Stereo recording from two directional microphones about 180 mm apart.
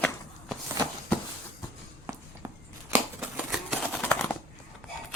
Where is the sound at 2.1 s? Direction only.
15° right (ahead or behind).